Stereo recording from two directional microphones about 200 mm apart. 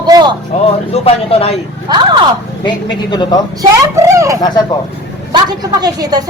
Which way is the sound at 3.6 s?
15° right (ahead or behind).